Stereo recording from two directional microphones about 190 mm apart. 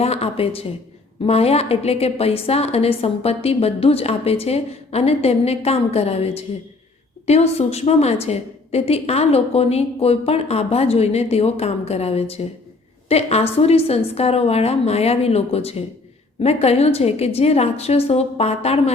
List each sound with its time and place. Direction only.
0.0 s a woman's voice: 30° left (ahead or behind)